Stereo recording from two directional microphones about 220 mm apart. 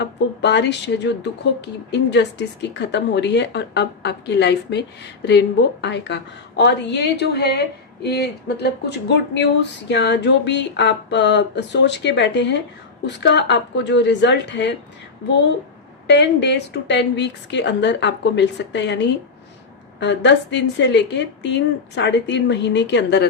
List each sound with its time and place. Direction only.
0.0 s a woman's voice: 50° left (ahead or behind)
16.0 s a woman's voice: 50° left (ahead or behind)